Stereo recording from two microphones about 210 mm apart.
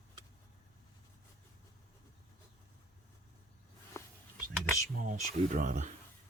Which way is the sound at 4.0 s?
15° left (ahead or behind).